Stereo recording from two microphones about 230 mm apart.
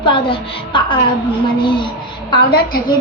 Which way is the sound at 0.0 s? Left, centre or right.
Left.